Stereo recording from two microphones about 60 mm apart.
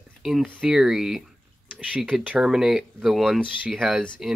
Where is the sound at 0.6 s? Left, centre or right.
Centre.